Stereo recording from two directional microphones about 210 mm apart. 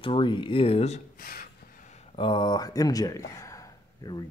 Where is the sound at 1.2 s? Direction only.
45° left (ahead or behind); by 4.2 s 20° left (ahead or behind).